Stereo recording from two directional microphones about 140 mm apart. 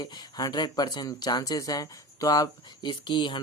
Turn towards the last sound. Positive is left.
turn(degrees=35)  # may be behind; listen again after turning